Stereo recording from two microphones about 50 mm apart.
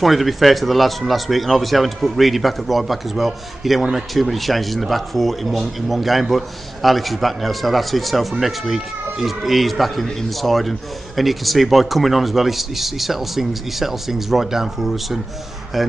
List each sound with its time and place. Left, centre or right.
0.0 s a man's voice: centre